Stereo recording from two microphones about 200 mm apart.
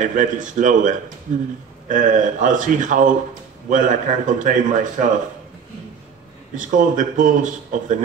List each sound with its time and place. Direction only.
0.0 s speech: 40° right (ahead or behind)
6.6 s speech: 40° right (ahead or behind)